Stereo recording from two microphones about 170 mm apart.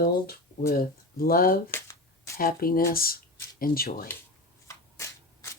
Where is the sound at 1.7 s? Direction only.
15° left (ahead or behind).